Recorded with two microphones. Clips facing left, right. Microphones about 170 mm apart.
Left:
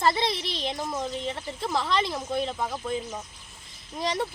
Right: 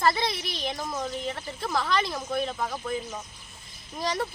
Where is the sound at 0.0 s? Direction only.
25° left (ahead or behind).